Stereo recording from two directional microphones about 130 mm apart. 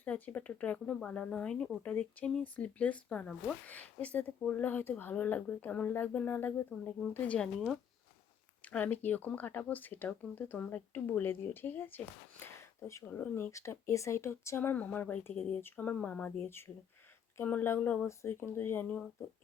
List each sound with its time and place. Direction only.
0.0 s speech: 10° left (ahead or behind)